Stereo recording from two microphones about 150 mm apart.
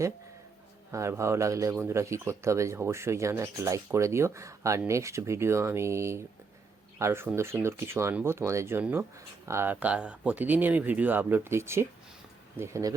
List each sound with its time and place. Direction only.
0.9 s speech: 20° right (ahead or behind)